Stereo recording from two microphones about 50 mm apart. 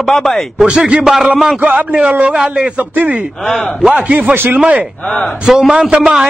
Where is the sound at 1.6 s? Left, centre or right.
Right.